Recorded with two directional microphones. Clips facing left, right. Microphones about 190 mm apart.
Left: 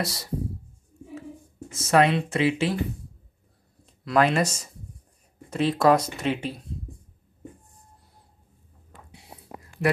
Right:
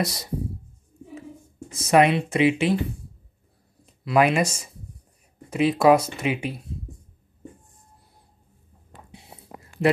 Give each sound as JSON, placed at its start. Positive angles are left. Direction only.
{"t": 0.0, "sound": "speech", "side_deg": -20}
{"t": 1.7, "sound": "speech", "side_deg": -15}
{"t": 3.8, "sound": "speech", "side_deg": -10}